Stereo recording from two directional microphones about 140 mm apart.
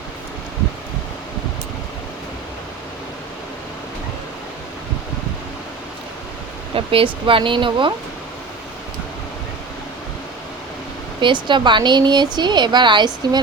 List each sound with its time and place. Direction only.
6.7 s speech: 40° right (ahead or behind)
11.2 s speech: 35° right (ahead or behind)